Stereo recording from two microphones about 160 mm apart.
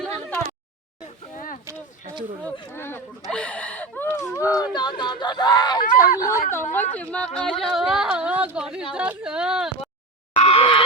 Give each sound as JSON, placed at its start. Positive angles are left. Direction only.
{"t": 2.4, "sound": "speech", "side_deg": 15}
{"t": 5.9, "sound": "speech", "side_deg": 55}
{"t": 6.7, "sound": "speech", "side_deg": 10}
{"t": 10.3, "sound": "a sound", "side_deg": 35}